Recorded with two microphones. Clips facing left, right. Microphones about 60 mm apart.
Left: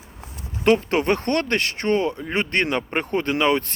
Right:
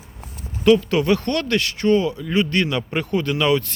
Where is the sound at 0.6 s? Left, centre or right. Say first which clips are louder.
Right 3 dB; left.